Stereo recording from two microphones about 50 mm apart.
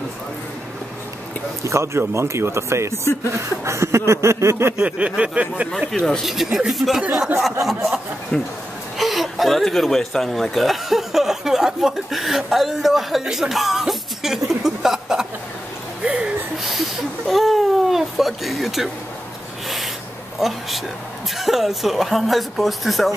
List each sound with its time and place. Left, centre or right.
1.6 s a sound: right
3.3 s a sound: right
4.8 s a sound: right
5.9 s speech: centre
6.2 s a woman's voice: centre
8.3 s speech: left
8.9 s speech: centre
16.5 s a woman's voice: centre
20.3 s a woman's voice: centre